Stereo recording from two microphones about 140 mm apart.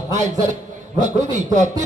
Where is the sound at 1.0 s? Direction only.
60° right (ahead or behind).